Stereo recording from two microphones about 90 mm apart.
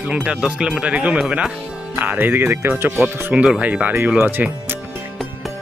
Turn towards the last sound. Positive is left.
turn(degrees=-25)  # may be behind; listen again after turning